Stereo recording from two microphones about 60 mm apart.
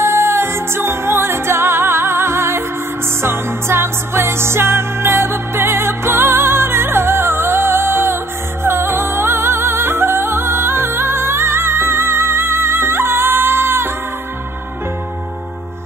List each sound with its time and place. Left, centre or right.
0.0 s music: right